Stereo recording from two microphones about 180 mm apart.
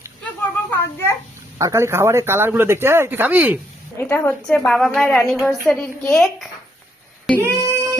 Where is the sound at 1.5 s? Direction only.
15° right (ahead or behind).